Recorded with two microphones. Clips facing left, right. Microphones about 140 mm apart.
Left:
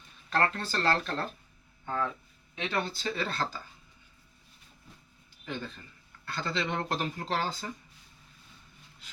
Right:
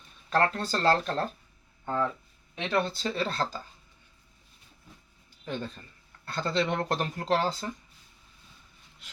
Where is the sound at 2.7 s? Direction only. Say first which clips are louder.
Right 5 dB; 30° right (ahead or behind).